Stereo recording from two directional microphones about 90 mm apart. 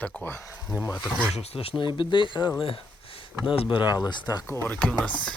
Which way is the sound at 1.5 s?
90° left.